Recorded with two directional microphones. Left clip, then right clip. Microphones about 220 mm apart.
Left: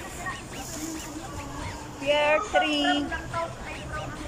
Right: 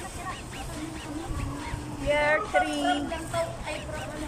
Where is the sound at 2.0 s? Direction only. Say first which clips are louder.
Left 2 dB; 5° left (ahead or behind).